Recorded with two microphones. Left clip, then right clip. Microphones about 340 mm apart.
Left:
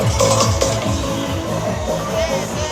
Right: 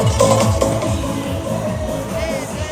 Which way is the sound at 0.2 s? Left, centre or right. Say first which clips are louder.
Right 1 dB; right.